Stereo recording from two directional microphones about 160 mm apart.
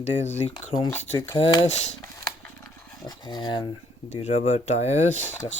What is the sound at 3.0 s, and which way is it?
Speech, 25° left (ahead or behind).